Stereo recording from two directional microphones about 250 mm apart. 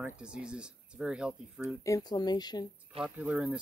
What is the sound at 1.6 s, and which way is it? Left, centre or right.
Speech, centre.